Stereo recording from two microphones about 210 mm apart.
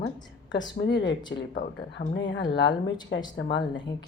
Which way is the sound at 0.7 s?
55° left (ahead or behind).